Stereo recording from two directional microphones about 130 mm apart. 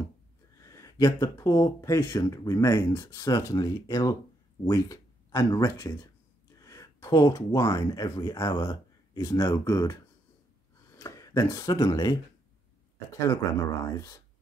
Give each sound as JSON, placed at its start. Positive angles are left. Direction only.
{"t": 0.6, "sound": "speech", "side_deg": 25}
{"t": 11.0, "sound": "speech", "side_deg": 25}
{"t": 13.3, "sound": "speech", "side_deg": 25}